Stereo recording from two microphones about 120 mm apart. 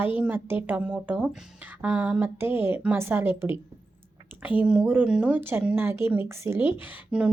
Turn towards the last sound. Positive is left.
turn(degrees=-10)  # may be behind; listen again after turning